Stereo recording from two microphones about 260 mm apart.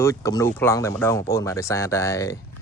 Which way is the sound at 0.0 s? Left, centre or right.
Centre.